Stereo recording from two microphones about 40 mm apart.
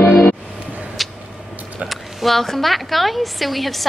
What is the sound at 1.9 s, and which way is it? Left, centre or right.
A woman's voice, centre.